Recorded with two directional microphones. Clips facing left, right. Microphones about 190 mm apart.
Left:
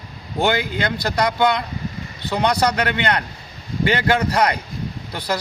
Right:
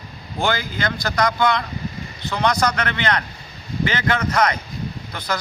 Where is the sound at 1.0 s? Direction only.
30° left (ahead or behind).